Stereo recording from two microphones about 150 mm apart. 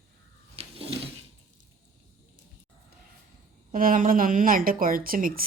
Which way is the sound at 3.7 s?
70° right (ahead or behind).